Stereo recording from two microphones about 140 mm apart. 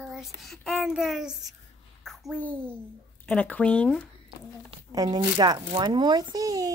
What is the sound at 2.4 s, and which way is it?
Speech, 15° right (ahead or behind).